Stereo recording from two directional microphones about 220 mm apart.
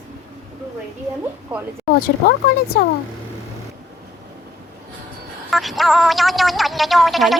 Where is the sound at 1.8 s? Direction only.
45° left (ahead or behind).